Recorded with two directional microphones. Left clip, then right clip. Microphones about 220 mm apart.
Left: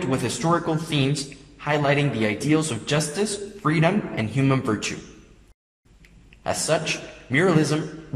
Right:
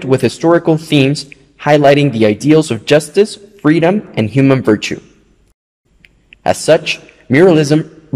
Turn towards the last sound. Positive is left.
turn(degrees=-45)  # may be behind; listen again after turning